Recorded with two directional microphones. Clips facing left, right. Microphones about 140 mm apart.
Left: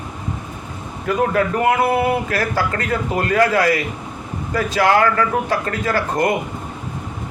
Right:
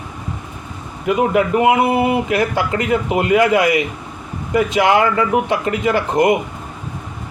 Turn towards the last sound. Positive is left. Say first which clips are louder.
# right 4 dB
turn(degrees=-20)  # may be behind; listen again after turning